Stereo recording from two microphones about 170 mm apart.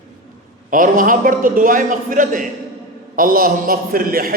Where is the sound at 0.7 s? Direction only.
55° right (ahead or behind).